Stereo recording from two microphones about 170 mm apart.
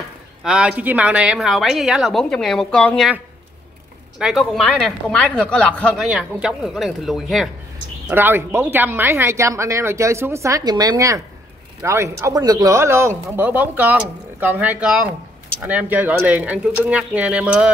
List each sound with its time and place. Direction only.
0.4 s a woman's voice: 5° right (ahead or behind)
4.2 s a woman's voice: centre (ahead or behind)
6.0 s a woman's voice: 5° right (ahead or behind)
8.1 s speech: 10° right (ahead or behind)